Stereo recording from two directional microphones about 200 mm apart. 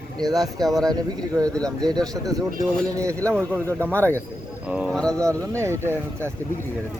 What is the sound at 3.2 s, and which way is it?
Speech, 10° right (ahead or behind).